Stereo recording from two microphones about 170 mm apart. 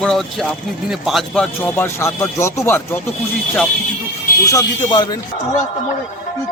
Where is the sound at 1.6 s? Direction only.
15° left (ahead or behind).